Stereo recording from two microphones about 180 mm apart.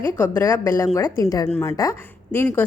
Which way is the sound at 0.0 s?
15° left (ahead or behind).